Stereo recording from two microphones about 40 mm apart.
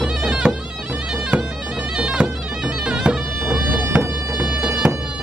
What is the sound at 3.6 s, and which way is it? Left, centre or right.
Music, right.